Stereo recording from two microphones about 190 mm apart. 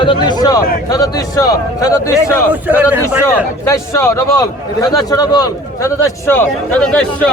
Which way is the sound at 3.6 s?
15° left (ahead or behind).